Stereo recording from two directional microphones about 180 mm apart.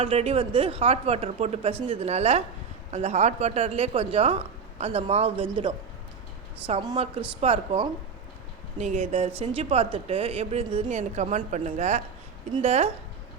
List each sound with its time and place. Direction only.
0.0 s speech: 30° right (ahead or behind)
6.9 s speech: 35° right (ahead or behind)